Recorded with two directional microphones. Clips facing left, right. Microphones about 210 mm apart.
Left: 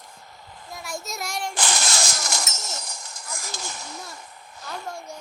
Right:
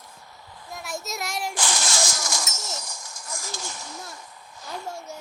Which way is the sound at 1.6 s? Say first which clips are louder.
Even; 65° left (ahead or behind).